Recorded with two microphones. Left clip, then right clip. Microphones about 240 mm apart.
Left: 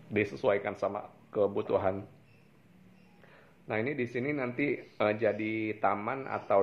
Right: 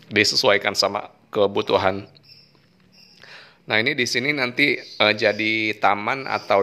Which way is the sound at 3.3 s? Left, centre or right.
Right.